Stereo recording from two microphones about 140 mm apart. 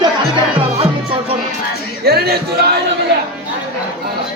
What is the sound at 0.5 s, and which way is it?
Music, 45° right (ahead or behind).